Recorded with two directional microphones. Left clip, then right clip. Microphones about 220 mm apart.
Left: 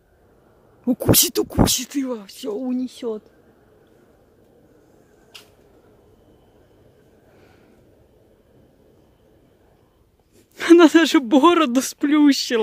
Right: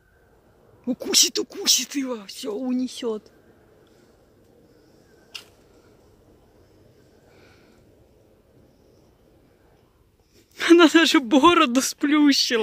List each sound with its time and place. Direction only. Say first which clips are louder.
0.8 s speech: left 2 dB; 30° left (ahead or behind); by 3.2 s centre (ahead or behind)
10.5 s speech: left 3 dB; 20° left (ahead or behind)